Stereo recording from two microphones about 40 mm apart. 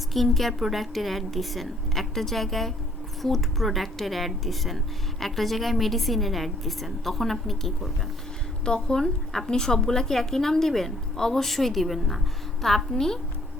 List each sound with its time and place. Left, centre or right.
0.1 s a woman's voice: centre
8.6 s a woman's voice: centre